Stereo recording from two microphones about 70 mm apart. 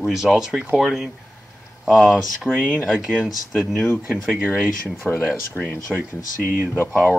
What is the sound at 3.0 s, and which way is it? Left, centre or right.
Speech, centre.